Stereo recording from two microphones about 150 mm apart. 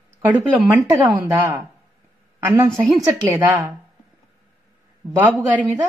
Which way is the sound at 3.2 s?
20° right (ahead or behind).